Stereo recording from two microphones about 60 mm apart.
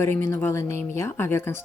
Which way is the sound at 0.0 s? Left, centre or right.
Left.